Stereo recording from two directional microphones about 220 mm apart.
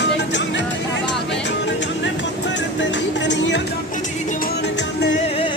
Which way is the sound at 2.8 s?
55° left (ahead or behind).